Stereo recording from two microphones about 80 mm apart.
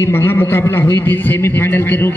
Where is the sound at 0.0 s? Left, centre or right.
Left.